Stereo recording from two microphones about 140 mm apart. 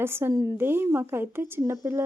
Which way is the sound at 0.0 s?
15° right (ahead or behind).